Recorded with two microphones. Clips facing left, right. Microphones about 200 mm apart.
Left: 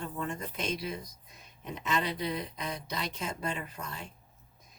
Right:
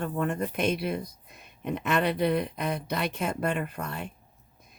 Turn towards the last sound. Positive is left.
turn(degrees=-60)  # may be behind; listen again after turning